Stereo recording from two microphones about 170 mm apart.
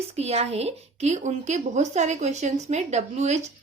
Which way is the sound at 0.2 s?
40° right (ahead or behind).